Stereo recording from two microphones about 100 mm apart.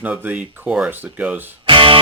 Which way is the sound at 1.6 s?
60° right (ahead or behind).